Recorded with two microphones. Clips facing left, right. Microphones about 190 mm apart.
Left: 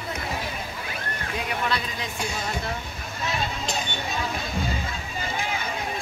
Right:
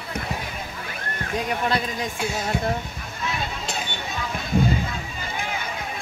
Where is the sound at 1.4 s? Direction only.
45° right (ahead or behind).